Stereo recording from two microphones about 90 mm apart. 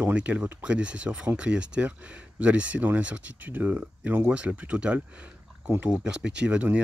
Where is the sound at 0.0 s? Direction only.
15° right (ahead or behind).